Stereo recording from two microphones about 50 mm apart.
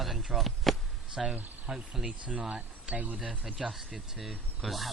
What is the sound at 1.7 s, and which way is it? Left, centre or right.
Speech, centre.